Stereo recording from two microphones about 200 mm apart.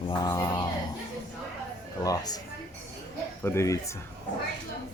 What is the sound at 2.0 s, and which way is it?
Speech, 20° left (ahead or behind).